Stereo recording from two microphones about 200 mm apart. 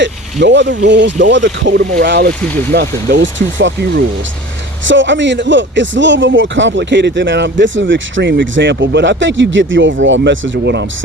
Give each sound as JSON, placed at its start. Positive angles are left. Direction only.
{"t": 0.4, "sound": "speech", "side_deg": -60}